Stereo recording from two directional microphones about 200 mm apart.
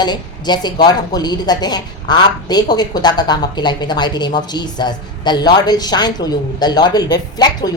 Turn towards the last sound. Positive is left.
turn(degrees=20)  # may be behind; listen again after turning